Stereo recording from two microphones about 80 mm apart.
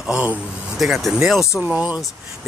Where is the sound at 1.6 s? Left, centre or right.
Centre.